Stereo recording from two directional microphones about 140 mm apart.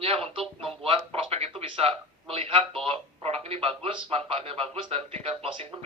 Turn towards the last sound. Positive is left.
turn(degrees=-40)  # may be behind; listen again after turning